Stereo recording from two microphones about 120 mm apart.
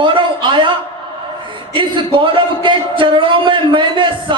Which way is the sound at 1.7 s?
45° right (ahead or behind).